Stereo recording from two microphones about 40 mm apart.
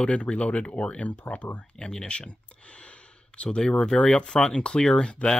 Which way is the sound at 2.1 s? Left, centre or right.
Left.